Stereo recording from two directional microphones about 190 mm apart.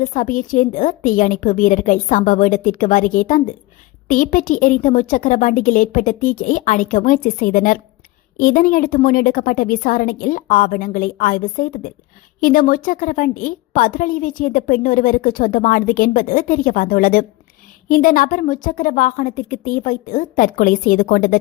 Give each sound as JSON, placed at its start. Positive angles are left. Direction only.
{"t": 0.0, "sound": "a woman's voice", "side_deg": 45}